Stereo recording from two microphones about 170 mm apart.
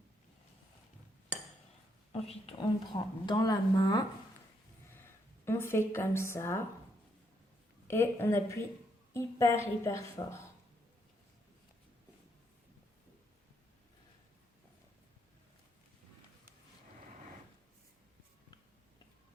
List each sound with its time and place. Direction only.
2.1 s speech: 35° left (ahead or behind)
4.9 s speech: 15° left (ahead or behind)
7.9 s a woman's voice: 15° left (ahead or behind)